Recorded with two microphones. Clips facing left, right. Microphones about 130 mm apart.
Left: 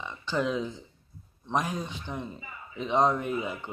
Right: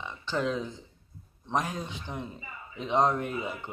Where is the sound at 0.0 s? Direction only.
5° left (ahead or behind).